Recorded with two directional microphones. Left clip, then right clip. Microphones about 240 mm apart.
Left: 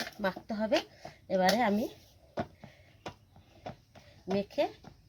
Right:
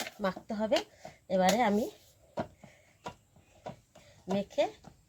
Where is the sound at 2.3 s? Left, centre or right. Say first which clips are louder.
Even; centre.